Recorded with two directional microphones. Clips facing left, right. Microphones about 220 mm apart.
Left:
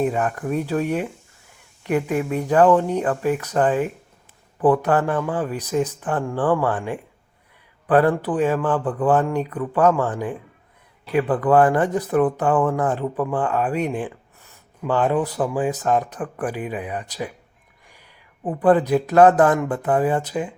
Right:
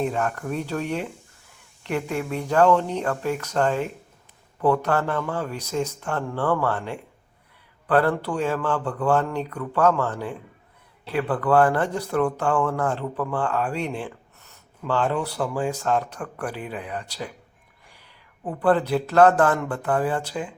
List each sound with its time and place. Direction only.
0.0 s speech: 10° left (ahead or behind)